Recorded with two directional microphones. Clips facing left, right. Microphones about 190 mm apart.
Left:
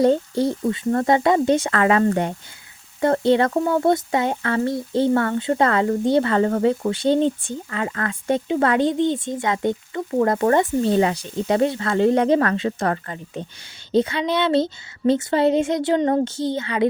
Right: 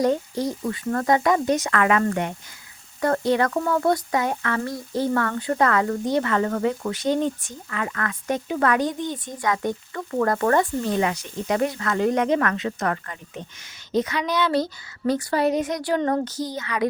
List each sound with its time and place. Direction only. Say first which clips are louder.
0.0 s speech: left 4 dB; 30° left (ahead or behind)